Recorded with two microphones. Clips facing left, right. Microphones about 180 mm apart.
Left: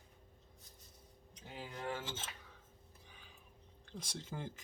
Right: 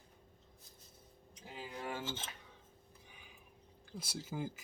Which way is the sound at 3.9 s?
5° right (ahead or behind).